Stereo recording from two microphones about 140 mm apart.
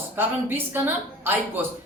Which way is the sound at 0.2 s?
15° right (ahead or behind).